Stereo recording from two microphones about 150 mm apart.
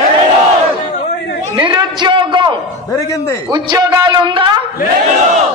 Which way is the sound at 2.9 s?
20° left (ahead or behind).